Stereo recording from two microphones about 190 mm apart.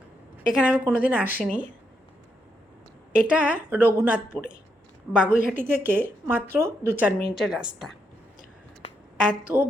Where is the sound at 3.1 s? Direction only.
5° right (ahead or behind).